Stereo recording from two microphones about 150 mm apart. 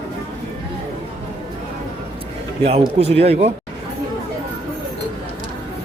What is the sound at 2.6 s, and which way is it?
Speech, 45° right (ahead or behind).